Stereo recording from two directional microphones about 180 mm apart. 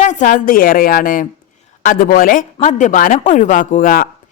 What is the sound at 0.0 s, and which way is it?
A woman's voice, 45° left (ahead or behind).